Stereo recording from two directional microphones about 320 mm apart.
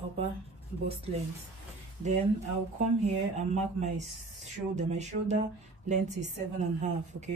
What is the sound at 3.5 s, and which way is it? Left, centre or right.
A woman's voice, right.